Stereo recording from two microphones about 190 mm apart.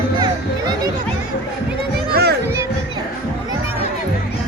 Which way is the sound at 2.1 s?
55° right (ahead or behind).